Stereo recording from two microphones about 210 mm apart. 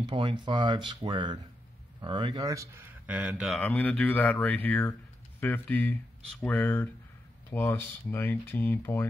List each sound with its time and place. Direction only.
0.0 s speech: 20° right (ahead or behind); by 9.0 s 10° left (ahead or behind)